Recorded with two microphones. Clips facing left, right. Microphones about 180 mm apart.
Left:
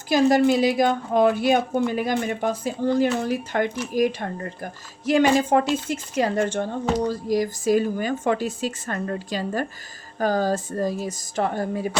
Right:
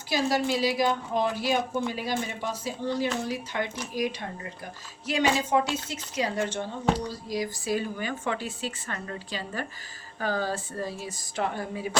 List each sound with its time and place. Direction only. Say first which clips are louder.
0.1 s speech: left 8 dB; 50° left (ahead or behind)